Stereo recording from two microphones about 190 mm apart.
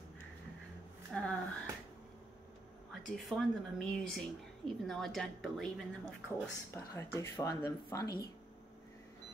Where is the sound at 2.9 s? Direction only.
Centre (ahead or behind).